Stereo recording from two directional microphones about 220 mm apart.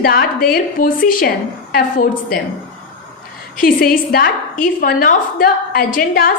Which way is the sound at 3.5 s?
40° left (ahead or behind).